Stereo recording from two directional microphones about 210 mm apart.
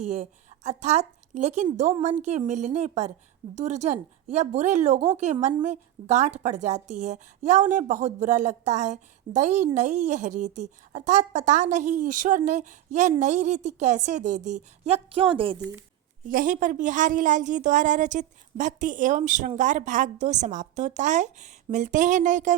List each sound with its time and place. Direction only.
0.1 s a woman's voice: 35° right (ahead or behind)
16.3 s a woman's voice: 40° right (ahead or behind)